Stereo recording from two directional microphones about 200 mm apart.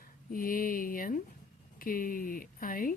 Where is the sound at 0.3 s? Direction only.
45° left (ahead or behind).